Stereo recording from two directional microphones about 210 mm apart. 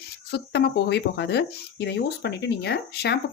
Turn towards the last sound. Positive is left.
turn(degrees=50)  # may be behind; listen again after turning